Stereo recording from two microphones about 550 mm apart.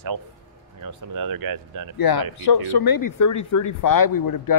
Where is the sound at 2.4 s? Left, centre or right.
Left.